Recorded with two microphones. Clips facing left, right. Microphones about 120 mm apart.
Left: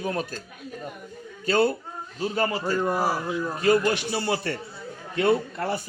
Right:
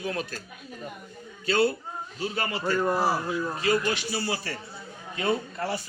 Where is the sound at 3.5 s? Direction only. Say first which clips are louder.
Left 6 dB; 55° left (ahead or behind).